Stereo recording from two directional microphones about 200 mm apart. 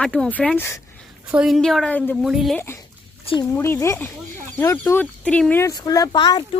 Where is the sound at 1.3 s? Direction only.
5° right (ahead or behind).